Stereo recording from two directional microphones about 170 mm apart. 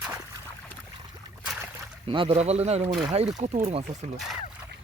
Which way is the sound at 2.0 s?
35° right (ahead or behind).